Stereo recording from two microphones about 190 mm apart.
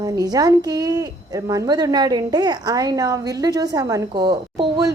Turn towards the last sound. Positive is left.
turn(degrees=-25)  # may be behind; listen again after turning